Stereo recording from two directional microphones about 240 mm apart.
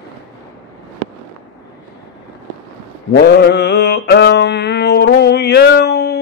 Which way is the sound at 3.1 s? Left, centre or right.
Left.